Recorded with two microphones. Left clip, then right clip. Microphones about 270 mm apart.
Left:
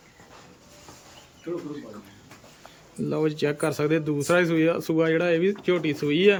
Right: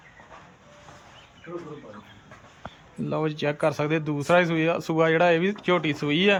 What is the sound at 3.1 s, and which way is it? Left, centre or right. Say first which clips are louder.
Speech: left 2 dB; centre.